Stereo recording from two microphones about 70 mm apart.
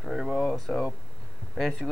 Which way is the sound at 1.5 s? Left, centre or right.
Centre.